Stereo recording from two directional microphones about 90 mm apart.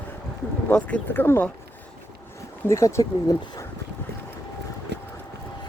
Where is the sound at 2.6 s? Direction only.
35° left (ahead or behind).